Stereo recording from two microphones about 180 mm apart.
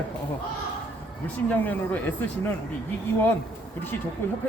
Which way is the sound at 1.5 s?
10° left (ahead or behind).